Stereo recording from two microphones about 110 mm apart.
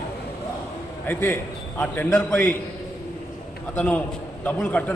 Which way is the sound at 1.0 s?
20° left (ahead or behind).